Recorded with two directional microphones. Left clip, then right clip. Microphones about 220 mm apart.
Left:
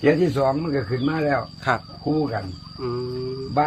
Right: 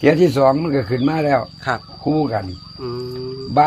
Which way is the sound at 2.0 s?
45° right (ahead or behind).